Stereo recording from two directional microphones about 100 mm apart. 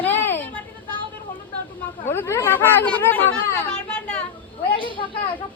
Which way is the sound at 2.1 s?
25° left (ahead or behind).